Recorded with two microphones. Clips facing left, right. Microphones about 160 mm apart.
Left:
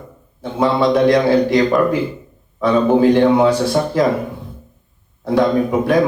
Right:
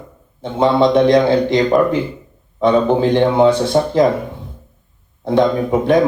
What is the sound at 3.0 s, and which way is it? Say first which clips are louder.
Speech: left 1 dB; 25° right (ahead or behind).